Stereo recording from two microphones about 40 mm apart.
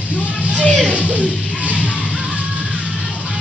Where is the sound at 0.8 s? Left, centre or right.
Right.